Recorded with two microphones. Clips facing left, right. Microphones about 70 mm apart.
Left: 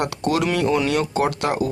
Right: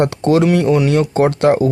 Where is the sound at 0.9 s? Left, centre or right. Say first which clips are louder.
Right 6 dB; right.